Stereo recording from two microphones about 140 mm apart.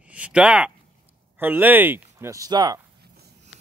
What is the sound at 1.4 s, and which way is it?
Speech, 15° right (ahead or behind).